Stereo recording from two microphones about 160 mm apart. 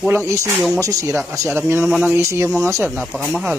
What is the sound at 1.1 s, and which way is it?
Speech, centre (ahead or behind).